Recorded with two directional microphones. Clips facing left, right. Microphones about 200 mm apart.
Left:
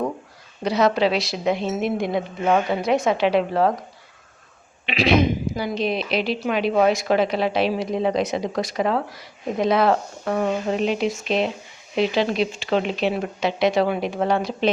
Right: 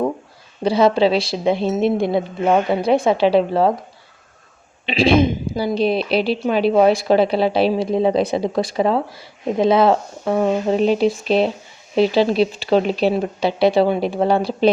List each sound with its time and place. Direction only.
0.6 s a woman's voice: 30° right (ahead or behind)
4.9 s a woman's voice: 30° right (ahead or behind)
10.8 s a woman's voice: 35° right (ahead or behind)